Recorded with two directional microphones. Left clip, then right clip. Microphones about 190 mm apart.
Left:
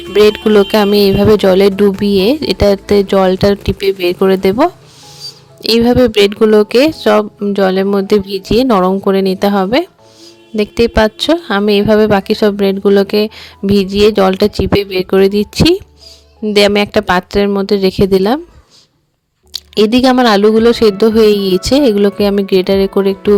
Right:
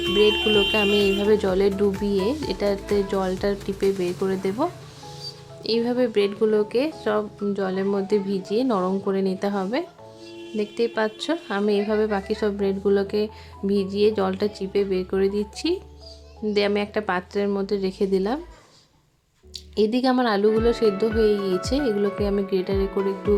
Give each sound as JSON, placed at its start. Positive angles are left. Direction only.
{"t": 0.1, "sound": "speech", "side_deg": 45}
{"t": 5.2, "sound": "music", "side_deg": 30}
{"t": 5.6, "sound": "speech", "side_deg": 45}
{"t": 19.5, "sound": "speech", "side_deg": 45}